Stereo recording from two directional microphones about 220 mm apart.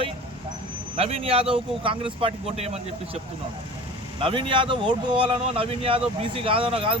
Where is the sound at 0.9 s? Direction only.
25° right (ahead or behind).